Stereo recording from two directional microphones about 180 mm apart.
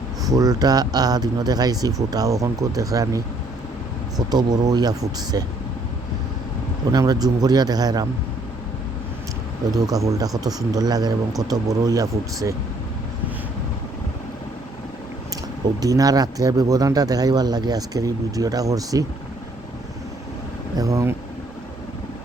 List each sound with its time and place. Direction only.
0.3 s speech: 20° right (ahead or behind)
4.3 s speech: 20° right (ahead or behind)
6.9 s speech: 20° right (ahead or behind)
9.8 s speech: 20° right (ahead or behind)
15.8 s speech: 20° right (ahead or behind)
20.7 s speech: 20° right (ahead or behind)